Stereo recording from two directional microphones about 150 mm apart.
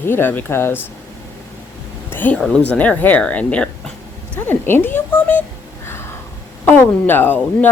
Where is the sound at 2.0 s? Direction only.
10° left (ahead or behind).